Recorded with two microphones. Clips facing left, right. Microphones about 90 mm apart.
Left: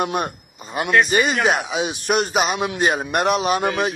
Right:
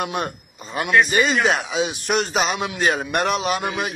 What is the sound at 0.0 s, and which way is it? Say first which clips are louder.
Speech: left 3 dB; 25° left (ahead or behind).